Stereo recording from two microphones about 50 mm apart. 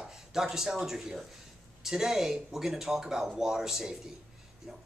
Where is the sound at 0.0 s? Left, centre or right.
Centre.